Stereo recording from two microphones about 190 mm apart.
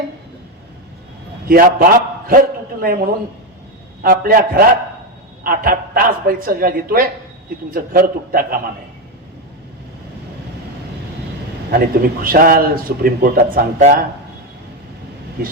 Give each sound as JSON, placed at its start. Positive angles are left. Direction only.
{"t": 1.5, "sound": "a man's voice", "side_deg": -50}
{"t": 4.0, "sound": "a man's voice", "side_deg": -50}
{"t": 11.7, "sound": "a man's voice", "side_deg": -50}